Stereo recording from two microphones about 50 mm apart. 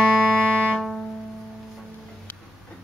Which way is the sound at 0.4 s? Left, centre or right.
Centre.